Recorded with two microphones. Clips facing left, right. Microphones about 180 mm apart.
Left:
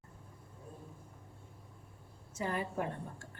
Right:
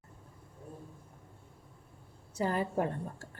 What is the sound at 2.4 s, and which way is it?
Speech, 35° right (ahead or behind).